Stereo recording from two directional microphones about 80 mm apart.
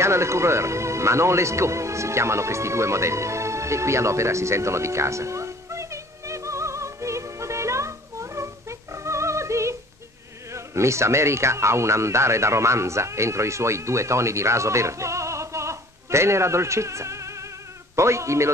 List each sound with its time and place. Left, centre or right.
0.0 s music: right
10.5 s a man's voice: right